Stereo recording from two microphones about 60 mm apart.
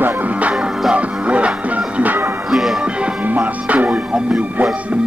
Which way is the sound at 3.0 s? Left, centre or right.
Right.